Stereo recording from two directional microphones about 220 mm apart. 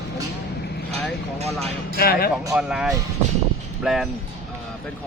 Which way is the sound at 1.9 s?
45° left (ahead or behind).